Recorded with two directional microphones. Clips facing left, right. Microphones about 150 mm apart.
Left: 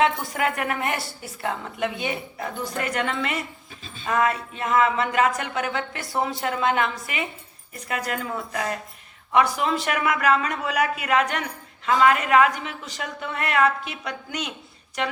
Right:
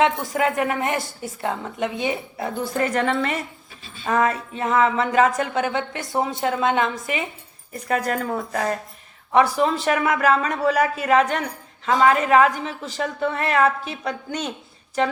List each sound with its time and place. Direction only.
0.0 s speech: 25° right (ahead or behind)
7.9 s a man's voice: 40° right (ahead or behind)